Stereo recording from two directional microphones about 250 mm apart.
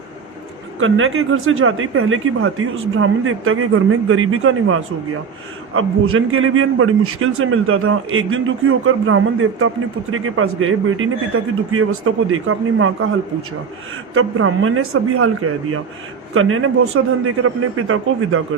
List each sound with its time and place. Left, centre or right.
0.8 s a man's voice: right
14.1 s a man's voice: right
16.3 s a man's voice: right